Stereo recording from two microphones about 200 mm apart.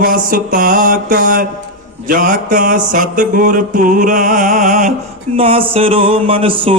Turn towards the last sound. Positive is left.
turn(degrees=-25)  # may be behind; listen again after turning